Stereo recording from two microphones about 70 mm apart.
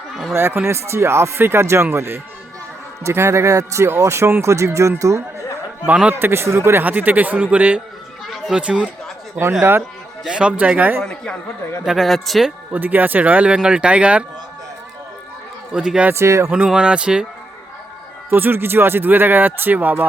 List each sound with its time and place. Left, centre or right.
0.3 s speech: right
5.8 s speech: right
6.1 s speech: right; by 8.9 s centre
9.4 s speech: right
10.2 s speech: centre
11.0 s speech: centre
11.9 s speech: centre
12.7 s speech: right
15.7 s speech: centre
16.1 s speech: right
16.6 s speech: centre
18.3 s speech: right